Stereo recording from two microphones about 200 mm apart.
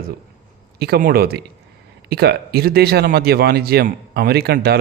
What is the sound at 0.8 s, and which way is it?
Speech, 50° right (ahead or behind).